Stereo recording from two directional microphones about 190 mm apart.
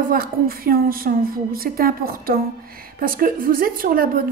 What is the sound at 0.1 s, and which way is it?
A woman's voice, 50° right (ahead or behind).